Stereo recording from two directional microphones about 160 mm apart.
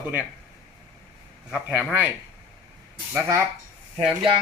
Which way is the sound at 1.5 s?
5° right (ahead or behind).